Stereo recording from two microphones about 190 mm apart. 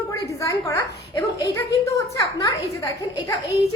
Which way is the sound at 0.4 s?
15° left (ahead or behind).